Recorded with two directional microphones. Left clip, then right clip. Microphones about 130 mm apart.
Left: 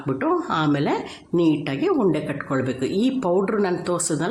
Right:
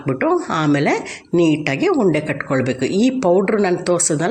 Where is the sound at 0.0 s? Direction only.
20° right (ahead or behind).